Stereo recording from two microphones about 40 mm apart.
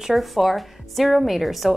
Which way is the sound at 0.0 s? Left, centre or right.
Centre.